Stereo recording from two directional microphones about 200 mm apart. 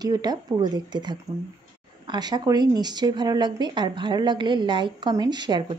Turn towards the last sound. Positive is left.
turn(degrees=-20)  # may be behind; listen again after turning